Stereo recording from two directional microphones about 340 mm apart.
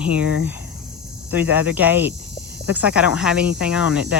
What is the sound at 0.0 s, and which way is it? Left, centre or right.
Speech, centre.